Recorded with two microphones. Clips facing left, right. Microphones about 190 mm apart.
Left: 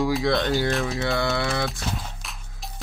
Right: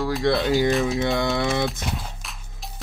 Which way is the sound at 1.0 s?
20° right (ahead or behind).